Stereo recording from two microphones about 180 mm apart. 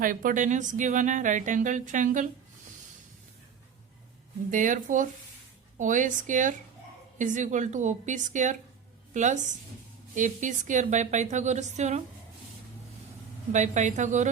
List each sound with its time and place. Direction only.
0.0 s speech: 50° right (ahead or behind)
4.5 s a woman's voice: 45° right (ahead or behind)
13.5 s speech: 40° right (ahead or behind)